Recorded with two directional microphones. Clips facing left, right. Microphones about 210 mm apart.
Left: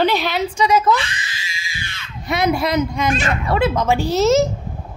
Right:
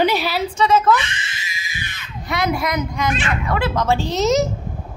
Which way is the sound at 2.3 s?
25° left (ahead or behind).